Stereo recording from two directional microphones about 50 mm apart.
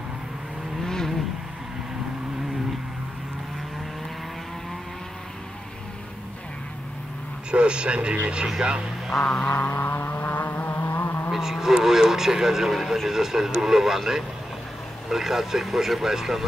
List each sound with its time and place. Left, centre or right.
0.8 s vehicle: centre
7.5 s speech: right
9.2 s music: left
9.7 s vehicle: left
11.3 s speech: centre